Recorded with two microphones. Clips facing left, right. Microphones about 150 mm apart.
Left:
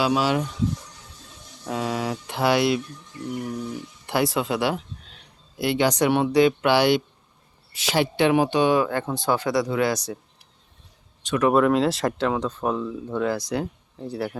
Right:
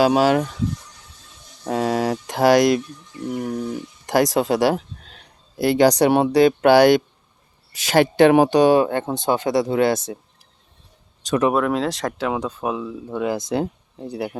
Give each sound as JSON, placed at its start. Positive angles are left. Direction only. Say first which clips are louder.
{"t": 0.0, "sound": "speech", "louder": "right 6 dB", "side_deg": -45}
{"t": 1.6, "sound": "speech", "louder": "right 6 dB", "side_deg": -45}
{"t": 11.5, "sound": "speech", "louder": "left 2 dB", "side_deg": 0}